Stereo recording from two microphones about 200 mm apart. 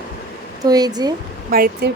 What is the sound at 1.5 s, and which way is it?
Speech, 50° right (ahead or behind).